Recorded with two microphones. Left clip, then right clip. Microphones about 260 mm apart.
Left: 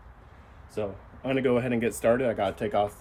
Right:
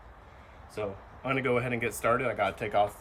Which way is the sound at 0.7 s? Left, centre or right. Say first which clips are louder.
Left 3 dB; left.